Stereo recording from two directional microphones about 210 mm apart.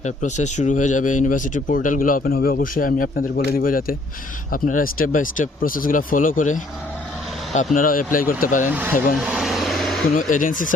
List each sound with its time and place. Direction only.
0.0 s speech: 35° left (ahead or behind)
9.1 s a sound: centre (ahead or behind)
10.2 s speech: 40° left (ahead or behind)